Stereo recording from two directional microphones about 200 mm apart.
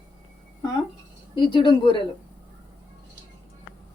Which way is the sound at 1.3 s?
25° left (ahead or behind).